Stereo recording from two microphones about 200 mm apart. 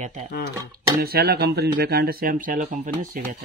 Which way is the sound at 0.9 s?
50° right (ahead or behind).